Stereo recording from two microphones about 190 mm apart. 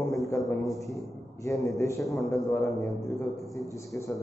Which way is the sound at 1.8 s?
15° left (ahead or behind).